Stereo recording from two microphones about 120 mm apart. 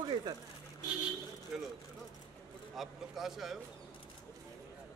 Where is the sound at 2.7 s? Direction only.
Centre (ahead or behind).